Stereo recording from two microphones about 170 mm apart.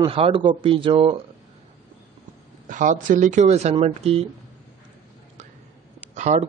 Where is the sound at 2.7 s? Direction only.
50° right (ahead or behind).